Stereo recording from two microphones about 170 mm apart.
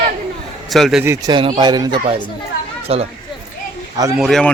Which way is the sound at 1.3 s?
30° right (ahead or behind).